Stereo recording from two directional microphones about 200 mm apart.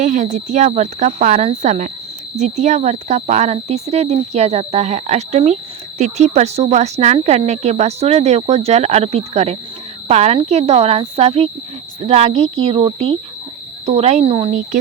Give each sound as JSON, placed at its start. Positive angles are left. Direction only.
{"t": 0.0, "sound": "speech", "side_deg": -40}